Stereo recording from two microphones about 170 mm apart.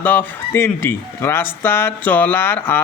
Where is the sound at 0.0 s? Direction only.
10° left (ahead or behind).